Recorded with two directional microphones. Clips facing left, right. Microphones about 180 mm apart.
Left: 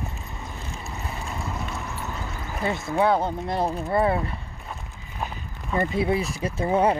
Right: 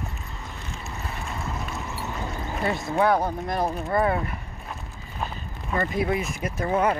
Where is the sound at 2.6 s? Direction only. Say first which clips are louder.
Even; 20° left (ahead or behind).